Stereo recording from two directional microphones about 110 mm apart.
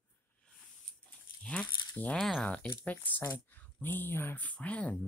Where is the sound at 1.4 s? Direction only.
10° left (ahead or behind).